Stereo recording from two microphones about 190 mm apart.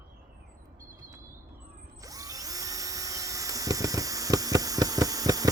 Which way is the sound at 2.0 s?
20° right (ahead or behind).